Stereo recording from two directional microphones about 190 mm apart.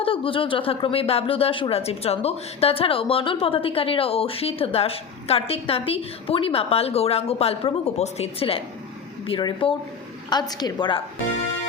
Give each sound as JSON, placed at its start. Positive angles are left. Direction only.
{"t": 0.0, "sound": "speech", "side_deg": 30}